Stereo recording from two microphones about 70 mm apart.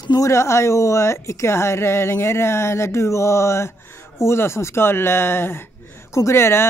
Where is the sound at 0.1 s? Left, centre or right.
Left.